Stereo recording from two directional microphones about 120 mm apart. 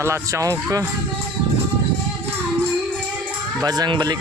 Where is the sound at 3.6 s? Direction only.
35° right (ahead or behind).